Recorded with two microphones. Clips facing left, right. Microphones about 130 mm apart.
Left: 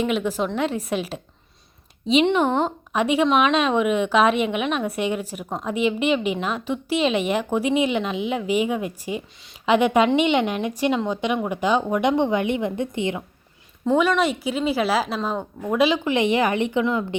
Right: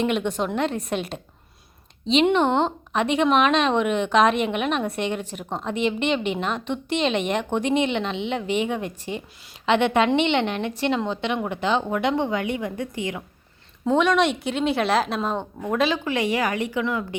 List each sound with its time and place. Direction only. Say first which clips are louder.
0.0 s a woman's voice: left 1 dB; centre (ahead or behind)
2.3 s a woman's voice: even; 5° left (ahead or behind); by 13.2 s 25° left (ahead or behind)
13.8 s a woman's voice: even; centre (ahead or behind); by 17.2 s 20° left (ahead or behind)